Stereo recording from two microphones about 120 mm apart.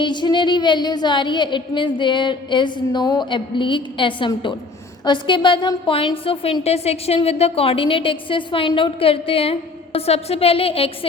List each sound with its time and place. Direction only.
0.0 s a woman's voice: 40° left (ahead or behind)